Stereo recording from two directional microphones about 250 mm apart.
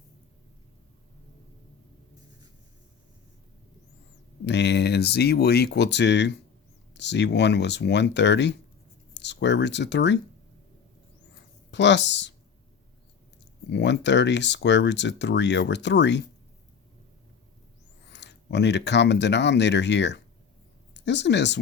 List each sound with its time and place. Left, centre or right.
4.4 s speech: left
11.7 s speech: left
13.7 s speech: left
18.1 s speech: left